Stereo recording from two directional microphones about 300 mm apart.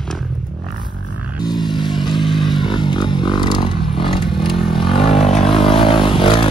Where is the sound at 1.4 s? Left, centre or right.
Centre.